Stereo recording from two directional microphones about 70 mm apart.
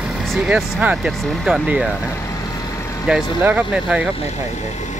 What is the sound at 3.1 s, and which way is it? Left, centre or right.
Speech, centre.